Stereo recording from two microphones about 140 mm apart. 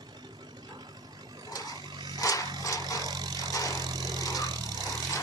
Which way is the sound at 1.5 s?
25° left (ahead or behind).